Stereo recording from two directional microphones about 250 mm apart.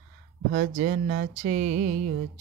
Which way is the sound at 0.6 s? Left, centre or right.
Right.